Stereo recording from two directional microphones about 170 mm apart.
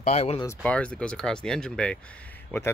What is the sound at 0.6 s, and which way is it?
Speech, 5° left (ahead or behind).